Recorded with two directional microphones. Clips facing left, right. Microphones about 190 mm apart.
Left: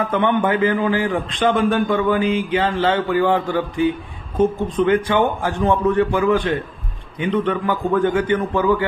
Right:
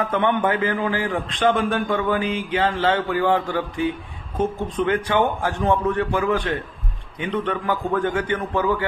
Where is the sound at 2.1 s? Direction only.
25° left (ahead or behind).